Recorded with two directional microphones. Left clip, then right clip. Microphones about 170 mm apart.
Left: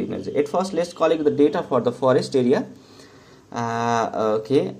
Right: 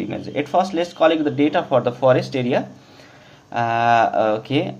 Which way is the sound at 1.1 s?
25° left (ahead or behind).